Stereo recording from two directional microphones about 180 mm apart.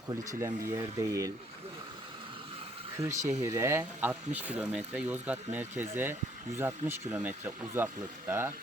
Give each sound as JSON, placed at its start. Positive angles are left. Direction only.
{"t": 0.3, "sound": "speech", "side_deg": -15}
{"t": 3.0, "sound": "speech", "side_deg": -15}